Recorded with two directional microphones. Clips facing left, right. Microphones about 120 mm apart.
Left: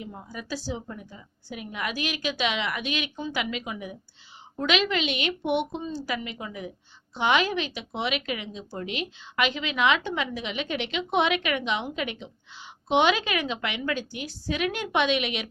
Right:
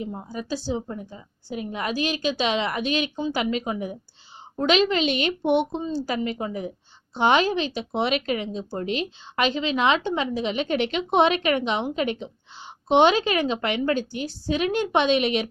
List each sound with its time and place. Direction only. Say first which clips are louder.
0.0 s speech: right 6 dB; 25° right (ahead or behind)